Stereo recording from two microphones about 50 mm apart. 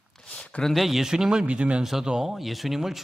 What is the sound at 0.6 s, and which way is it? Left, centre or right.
Speech, centre.